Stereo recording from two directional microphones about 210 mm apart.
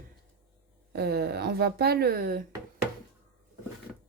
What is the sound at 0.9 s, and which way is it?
Speech, 50° right (ahead or behind).